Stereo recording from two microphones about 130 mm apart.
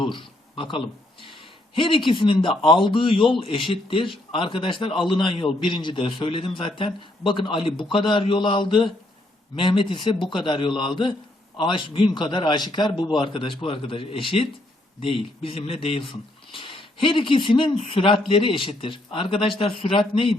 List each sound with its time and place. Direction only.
0.0 s a man's voice: 40° left (ahead or behind)